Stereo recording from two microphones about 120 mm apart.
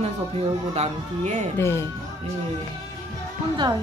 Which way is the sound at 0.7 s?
80° right.